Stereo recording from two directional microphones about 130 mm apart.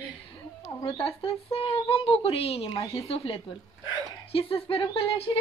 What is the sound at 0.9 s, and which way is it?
Speech, 45° left (ahead or behind).